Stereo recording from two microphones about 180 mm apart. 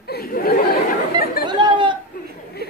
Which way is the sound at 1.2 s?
60° left (ahead or behind).